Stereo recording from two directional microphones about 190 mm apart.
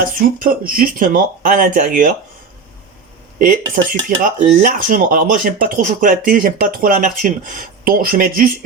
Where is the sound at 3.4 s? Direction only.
45° right (ahead or behind).